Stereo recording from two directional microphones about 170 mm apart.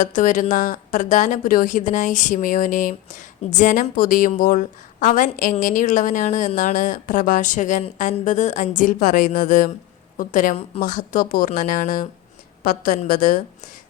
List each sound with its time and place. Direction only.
0.0 s a woman's voice: 50° left (ahead or behind)